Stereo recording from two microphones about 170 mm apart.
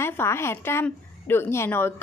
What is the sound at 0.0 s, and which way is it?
A woman's voice, 15° left (ahead or behind).